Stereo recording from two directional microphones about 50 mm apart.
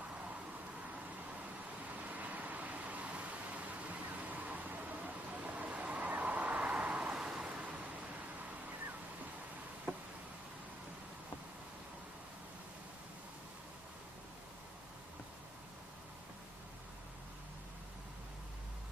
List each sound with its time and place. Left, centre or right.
2.0 s vehicle: right